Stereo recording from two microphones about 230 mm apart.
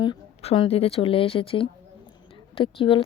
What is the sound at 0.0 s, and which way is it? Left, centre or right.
Speech, left.